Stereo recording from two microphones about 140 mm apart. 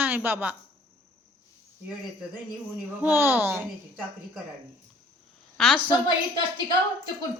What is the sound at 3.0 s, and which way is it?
Speech, 15° right (ahead or behind).